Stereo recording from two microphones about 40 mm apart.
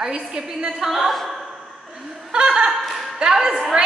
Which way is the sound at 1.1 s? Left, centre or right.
Centre.